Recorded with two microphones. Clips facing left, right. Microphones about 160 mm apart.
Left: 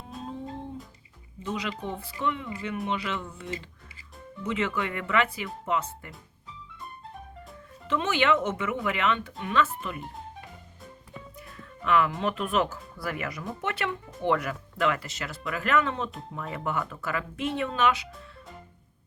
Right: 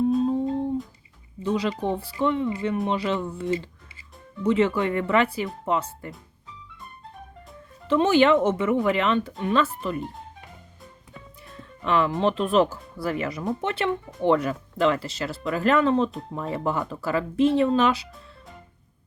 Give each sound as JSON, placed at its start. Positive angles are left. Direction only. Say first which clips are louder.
{"t": 1.4, "sound": "speech", "louder": "right 8 dB", "side_deg": -35}
{"t": 7.9, "sound": "speech", "louder": "right 7 dB", "side_deg": -35}
{"t": 11.5, "sound": "speech", "louder": "right 1 dB", "side_deg": -30}